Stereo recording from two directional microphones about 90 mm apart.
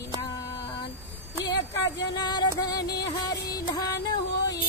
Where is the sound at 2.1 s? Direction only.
50° left (ahead or behind).